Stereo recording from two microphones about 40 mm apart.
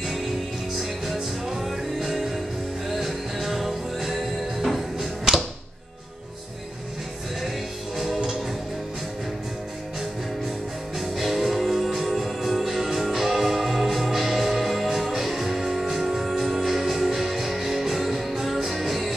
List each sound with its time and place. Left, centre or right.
0.7 s music: centre
4.9 s a sound: centre
7.4 s music: centre
11.0 s music: centre